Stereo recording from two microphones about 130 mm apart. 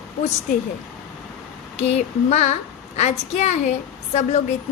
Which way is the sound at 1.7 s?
55° left (ahead or behind).